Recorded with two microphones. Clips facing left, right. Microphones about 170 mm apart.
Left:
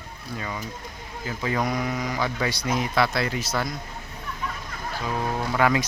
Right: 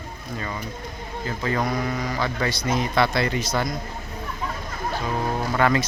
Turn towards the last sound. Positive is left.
turn(degrees=5)  # may be behind; listen again after turning